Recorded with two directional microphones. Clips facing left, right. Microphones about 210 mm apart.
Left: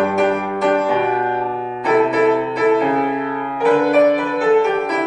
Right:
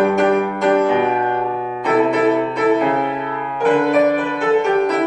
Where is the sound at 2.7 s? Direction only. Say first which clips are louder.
Left 1 dB; centre (ahead or behind).